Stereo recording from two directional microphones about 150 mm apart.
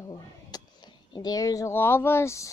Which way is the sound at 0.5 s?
25° left (ahead or behind).